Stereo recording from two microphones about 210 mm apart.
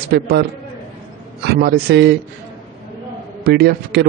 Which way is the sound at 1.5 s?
50° right (ahead or behind).